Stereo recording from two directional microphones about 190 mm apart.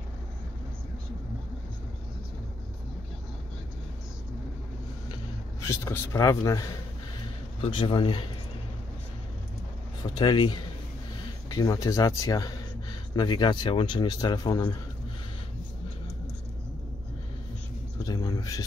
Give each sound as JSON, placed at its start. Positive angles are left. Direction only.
{"t": 5.7, "sound": "a man's voice", "side_deg": 15}
{"t": 10.0, "sound": "a man's voice", "side_deg": 25}
{"t": 17.9, "sound": "a sound", "side_deg": 20}